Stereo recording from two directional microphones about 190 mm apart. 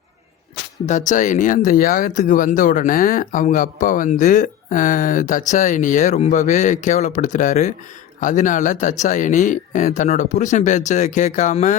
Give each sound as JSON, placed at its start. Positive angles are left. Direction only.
{"t": 0.9, "sound": "speech", "side_deg": 40}